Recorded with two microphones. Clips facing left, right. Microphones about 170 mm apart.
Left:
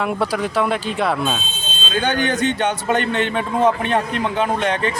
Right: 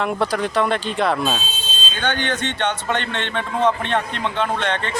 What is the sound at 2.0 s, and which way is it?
Speech, 40° left (ahead or behind).